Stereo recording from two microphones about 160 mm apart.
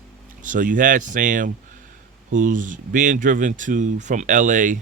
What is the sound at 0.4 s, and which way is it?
Speech, 55° right (ahead or behind).